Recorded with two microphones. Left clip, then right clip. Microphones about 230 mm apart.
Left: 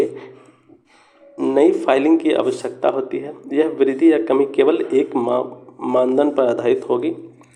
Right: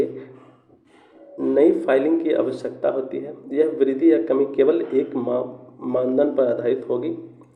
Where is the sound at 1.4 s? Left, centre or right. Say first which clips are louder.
Left 2 dB; left.